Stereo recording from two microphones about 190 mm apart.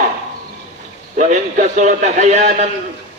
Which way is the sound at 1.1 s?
40° right (ahead or behind).